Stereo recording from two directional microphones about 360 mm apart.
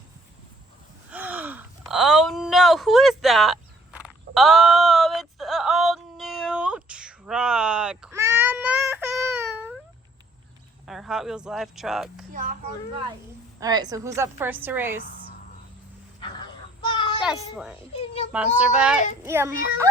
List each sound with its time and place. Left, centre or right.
1.1 s gasp: centre
10.8 s speech: centre
12.3 s speech: right
13.6 s a woman's voice: centre
17.0 s a sound: centre
17.2 s a child's voice: centre
17.9 s a child's voice: centre
18.3 s a child's voice: centre